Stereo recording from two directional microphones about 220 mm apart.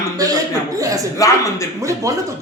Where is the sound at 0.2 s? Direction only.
15° right (ahead or behind).